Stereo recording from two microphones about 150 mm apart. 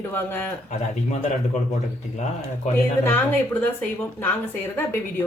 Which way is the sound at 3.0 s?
15° left (ahead or behind).